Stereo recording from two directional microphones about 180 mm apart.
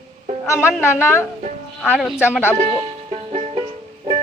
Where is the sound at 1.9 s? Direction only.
5° right (ahead or behind).